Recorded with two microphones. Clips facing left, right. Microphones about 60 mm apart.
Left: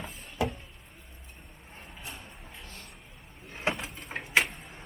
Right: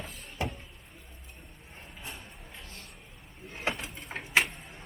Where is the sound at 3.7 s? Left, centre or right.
Centre.